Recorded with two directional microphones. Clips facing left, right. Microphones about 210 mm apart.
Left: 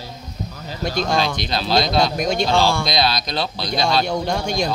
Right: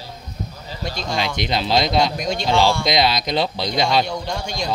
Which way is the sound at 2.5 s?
20° right (ahead or behind).